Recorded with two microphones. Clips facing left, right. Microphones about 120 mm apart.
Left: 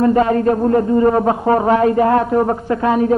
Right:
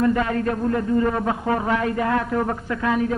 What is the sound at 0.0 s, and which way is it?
A man's voice, 35° left (ahead or behind).